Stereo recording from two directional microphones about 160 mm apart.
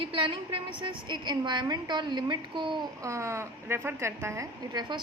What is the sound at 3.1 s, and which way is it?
A woman's voice, 20° right (ahead or behind).